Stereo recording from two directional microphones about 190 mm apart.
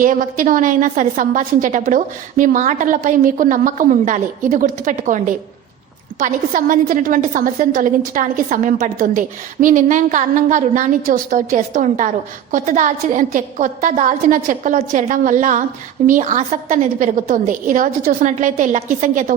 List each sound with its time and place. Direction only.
0.0 s a woman's voice: 45° right (ahead or behind)